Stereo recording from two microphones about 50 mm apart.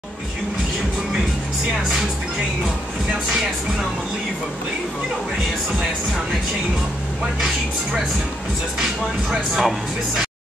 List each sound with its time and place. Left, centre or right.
9.3 s speech: centre